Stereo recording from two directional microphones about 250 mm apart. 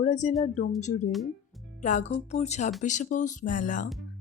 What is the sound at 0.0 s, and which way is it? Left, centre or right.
Speech, left.